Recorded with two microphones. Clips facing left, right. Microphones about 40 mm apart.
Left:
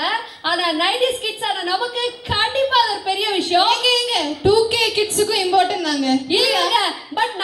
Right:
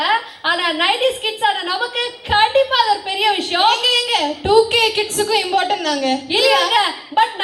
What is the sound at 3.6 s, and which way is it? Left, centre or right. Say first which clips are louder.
A woman's voice: right 2 dB; right.